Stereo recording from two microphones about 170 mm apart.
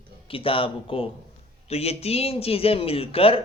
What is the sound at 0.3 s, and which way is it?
Speech, 30° left (ahead or behind).